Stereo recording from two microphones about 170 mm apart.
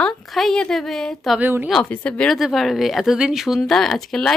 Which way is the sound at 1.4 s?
10° right (ahead or behind).